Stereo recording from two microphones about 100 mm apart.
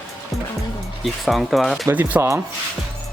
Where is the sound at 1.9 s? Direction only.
15° right (ahead or behind).